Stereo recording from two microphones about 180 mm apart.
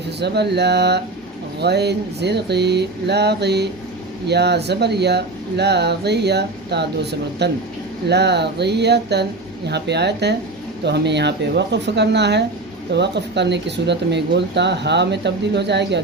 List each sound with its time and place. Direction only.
0.2 s speech: 65° right (ahead or behind)